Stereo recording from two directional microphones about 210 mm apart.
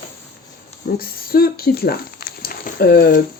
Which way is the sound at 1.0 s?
45° left (ahead or behind).